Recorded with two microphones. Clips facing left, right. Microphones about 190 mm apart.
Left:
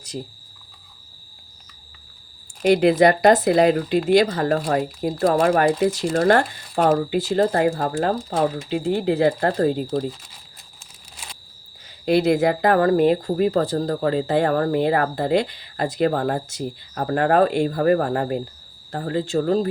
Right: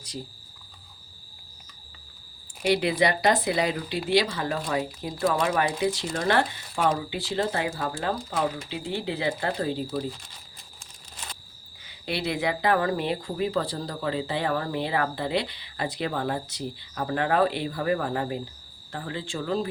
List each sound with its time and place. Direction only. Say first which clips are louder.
2.6 s speech: left 8 dB; 45° left (ahead or behind)
12.0 s speech: left 10 dB; 45° left (ahead or behind)